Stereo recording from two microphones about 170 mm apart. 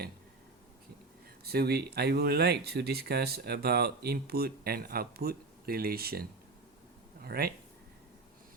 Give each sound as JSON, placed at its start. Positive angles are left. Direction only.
{"t": 1.5, "sound": "speech", "side_deg": -65}
{"t": 7.3, "sound": "speech", "side_deg": -65}